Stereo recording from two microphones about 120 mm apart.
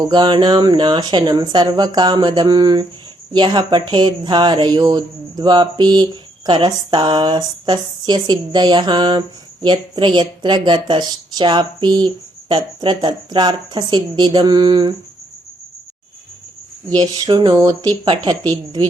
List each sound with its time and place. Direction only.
0.0 s speech: 40° right (ahead or behind)
16.9 s speech: 35° right (ahead or behind)